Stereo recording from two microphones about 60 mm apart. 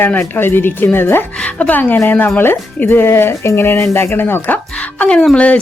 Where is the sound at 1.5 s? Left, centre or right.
Left.